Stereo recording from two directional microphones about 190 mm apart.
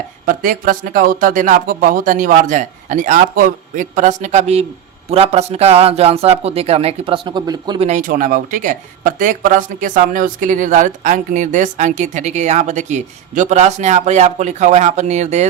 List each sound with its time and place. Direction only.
0.3 s speech: 45° right (ahead or behind); by 7.9 s 20° right (ahead or behind)
7.9 s speech: 40° right (ahead or behind)